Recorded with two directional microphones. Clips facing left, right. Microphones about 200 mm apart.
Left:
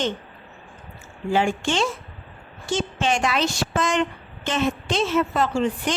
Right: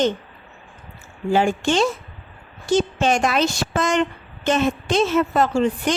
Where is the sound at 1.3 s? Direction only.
40° right (ahead or behind).